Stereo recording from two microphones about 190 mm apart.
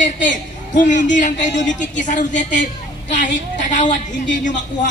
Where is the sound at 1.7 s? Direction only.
40° left (ahead or behind).